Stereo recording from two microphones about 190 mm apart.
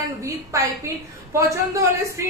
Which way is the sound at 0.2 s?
15° right (ahead or behind).